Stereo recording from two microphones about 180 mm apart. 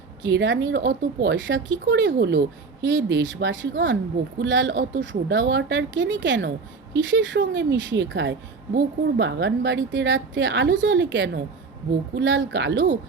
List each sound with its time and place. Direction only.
0.2 s speech: 90° right; by 2.4 s 70° right (ahead or behind)
2.8 s speech: 90° right